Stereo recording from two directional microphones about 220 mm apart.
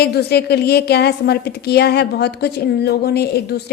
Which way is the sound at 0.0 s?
45° left (ahead or behind).